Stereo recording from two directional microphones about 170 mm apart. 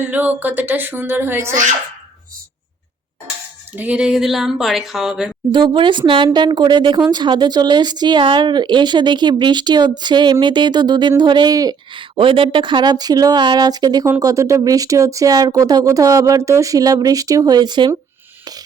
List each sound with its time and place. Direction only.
0.0 s speech: 10° right (ahead or behind)
3.8 s speech: 10° right (ahead or behind)
5.5 s speech: 25° right (ahead or behind)